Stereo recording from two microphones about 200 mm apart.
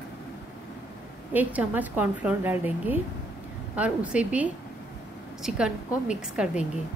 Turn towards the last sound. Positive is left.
turn(degrees=-5)  # may be behind; listen again after turning